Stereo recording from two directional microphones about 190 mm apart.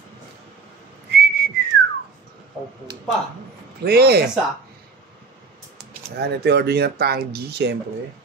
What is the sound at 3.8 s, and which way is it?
Speech, 55° right (ahead or behind).